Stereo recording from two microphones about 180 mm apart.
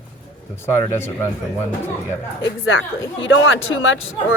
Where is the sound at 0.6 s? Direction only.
15° left (ahead or behind).